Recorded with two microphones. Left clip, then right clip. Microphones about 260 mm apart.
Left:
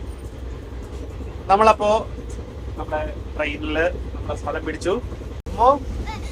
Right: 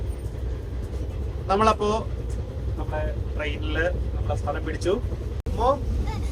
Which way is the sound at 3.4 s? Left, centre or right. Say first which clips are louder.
Left 6 dB; centre.